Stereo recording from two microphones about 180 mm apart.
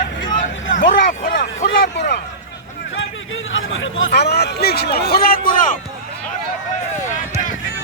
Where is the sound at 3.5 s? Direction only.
90° left; by 5.5 s 55° left (ahead or behind).